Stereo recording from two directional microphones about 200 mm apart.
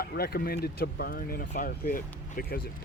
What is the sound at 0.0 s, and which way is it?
Speech, 50° left (ahead or behind).